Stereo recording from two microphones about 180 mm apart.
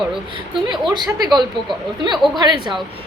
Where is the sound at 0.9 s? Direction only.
25° right (ahead or behind).